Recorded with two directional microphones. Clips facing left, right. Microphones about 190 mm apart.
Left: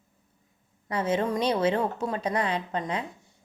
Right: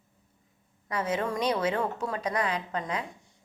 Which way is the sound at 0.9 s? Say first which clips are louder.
Left 3 dB; 25° left (ahead or behind).